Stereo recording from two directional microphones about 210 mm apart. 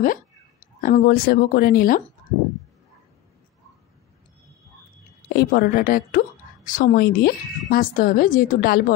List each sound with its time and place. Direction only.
0.0 s speech: 40° left (ahead or behind)
5.3 s a woman's voice: 45° left (ahead or behind)